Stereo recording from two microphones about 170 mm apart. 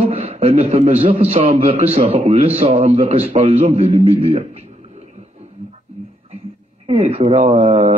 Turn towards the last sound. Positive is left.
turn(degrees=-45)  # may be behind; listen again after turning